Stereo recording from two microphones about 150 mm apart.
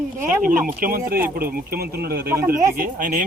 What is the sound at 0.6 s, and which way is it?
Speech, 70° right (ahead or behind).